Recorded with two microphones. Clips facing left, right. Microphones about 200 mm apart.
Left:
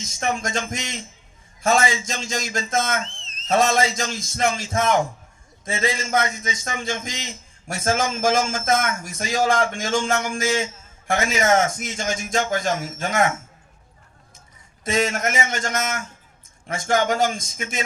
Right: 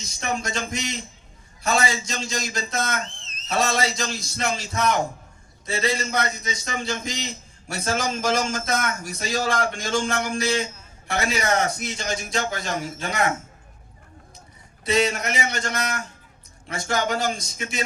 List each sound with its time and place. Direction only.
0.0 s a man's voice: 45° left (ahead or behind)
14.8 s a man's voice: 45° left (ahead or behind)